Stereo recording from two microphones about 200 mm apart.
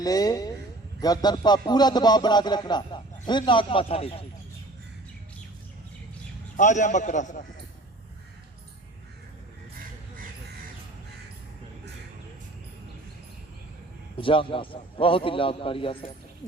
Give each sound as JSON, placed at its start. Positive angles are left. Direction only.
{"t": 0.0, "sound": "speech", "side_deg": 20}
{"t": 6.6, "sound": "a man's voice", "side_deg": 35}
{"t": 14.2, "sound": "speech", "side_deg": 25}